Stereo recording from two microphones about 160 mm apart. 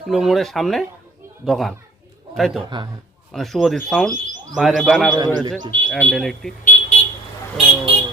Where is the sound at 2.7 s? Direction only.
30° right (ahead or behind).